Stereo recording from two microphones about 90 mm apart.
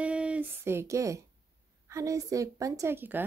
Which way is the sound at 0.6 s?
30° right (ahead or behind).